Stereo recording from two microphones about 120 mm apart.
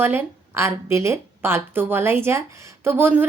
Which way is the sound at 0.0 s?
20° right (ahead or behind).